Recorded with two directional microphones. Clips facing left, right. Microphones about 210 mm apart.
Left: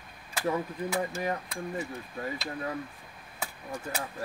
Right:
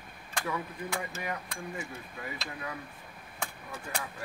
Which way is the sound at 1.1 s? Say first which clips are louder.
Left 5 dB; 35° left (ahead or behind).